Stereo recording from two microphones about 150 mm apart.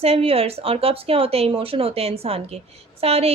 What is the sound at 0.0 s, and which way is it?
A woman's voice, 40° right (ahead or behind).